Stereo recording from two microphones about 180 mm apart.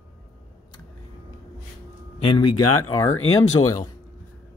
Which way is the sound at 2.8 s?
15° left (ahead or behind).